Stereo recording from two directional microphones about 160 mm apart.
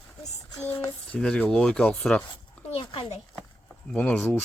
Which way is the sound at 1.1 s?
5° left (ahead or behind).